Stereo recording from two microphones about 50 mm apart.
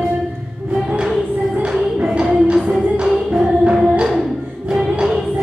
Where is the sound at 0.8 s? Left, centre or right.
Centre.